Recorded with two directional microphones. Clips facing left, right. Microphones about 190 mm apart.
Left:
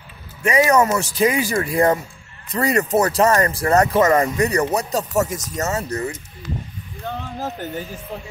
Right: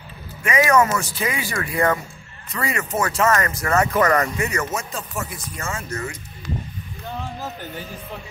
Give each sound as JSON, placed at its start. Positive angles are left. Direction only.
{"t": 0.4, "sound": "speech", "side_deg": 35}
{"t": 4.0, "sound": "speech", "side_deg": 25}
{"t": 4.4, "sound": "speech", "side_deg": 35}